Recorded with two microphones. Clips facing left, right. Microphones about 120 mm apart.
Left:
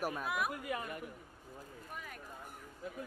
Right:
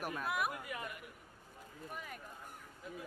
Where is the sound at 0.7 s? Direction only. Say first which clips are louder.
Left 5 dB; 40° left (ahead or behind).